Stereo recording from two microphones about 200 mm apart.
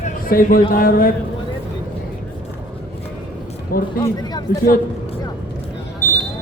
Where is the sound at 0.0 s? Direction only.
45° left (ahead or behind).